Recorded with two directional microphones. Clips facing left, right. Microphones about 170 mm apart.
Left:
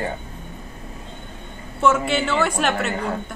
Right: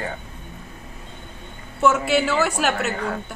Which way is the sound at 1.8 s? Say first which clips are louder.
Right 1 dB; centre (ahead or behind).